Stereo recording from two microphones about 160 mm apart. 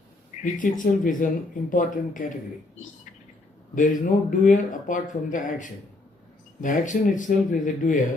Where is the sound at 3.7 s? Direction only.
55° left (ahead or behind).